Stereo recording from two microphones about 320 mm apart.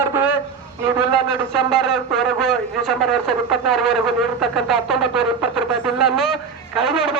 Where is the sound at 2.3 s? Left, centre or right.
Centre.